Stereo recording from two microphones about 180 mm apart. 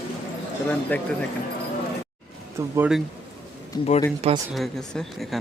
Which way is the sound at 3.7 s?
25° left (ahead or behind).